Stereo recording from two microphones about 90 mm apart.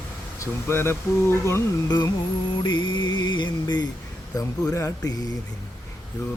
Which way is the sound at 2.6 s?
55° left (ahead or behind).